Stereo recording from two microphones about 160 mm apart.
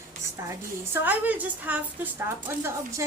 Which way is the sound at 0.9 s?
10° right (ahead or behind).